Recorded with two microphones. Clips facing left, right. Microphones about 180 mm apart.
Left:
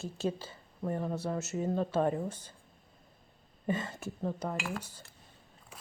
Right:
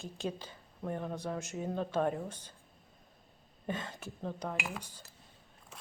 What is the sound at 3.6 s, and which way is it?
Speech, 5° left (ahead or behind).